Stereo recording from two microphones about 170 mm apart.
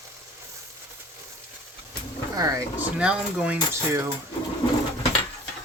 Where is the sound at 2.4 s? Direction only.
20° right (ahead or behind).